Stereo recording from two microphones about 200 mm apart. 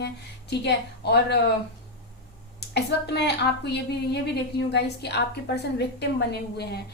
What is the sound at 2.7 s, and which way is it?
A woman's voice, 55° left (ahead or behind).